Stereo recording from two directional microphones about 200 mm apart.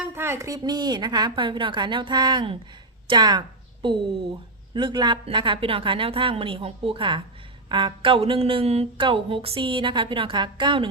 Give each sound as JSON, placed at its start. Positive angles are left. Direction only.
{"t": 0.0, "sound": "speech", "side_deg": -10}
{"t": 4.7, "sound": "speech", "side_deg": -25}